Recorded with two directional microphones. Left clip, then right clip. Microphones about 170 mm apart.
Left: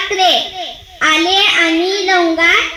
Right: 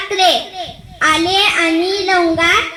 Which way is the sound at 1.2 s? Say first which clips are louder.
Left 2 dB; 20° left (ahead or behind).